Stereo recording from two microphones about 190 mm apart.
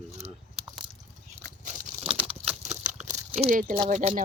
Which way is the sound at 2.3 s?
35° right (ahead or behind).